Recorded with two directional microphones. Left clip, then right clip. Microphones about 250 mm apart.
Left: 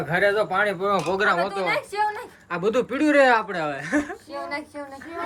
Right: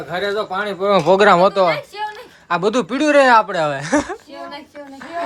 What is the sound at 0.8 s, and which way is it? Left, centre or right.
Speech, right.